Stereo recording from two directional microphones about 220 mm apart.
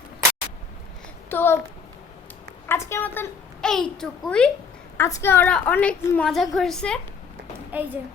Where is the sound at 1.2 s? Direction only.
10° left (ahead or behind).